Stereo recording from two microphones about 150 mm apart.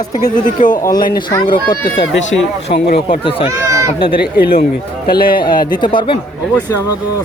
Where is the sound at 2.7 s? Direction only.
65° left (ahead or behind).